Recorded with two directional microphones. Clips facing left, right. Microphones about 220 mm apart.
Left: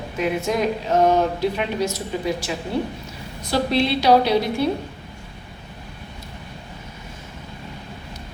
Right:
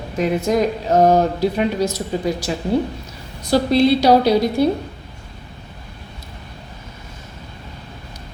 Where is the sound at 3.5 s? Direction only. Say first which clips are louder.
Right 6 dB; 40° right (ahead or behind).